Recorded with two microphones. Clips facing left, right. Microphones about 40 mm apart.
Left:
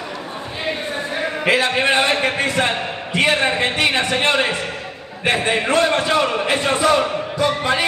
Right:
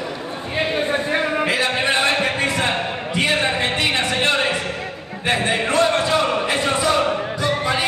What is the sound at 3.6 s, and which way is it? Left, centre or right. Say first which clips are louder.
A man's voice: left 2 dB; centre.